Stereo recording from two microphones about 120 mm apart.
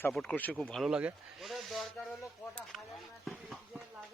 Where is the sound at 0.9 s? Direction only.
10° right (ahead or behind).